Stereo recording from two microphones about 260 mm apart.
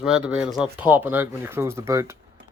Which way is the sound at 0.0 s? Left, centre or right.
Centre.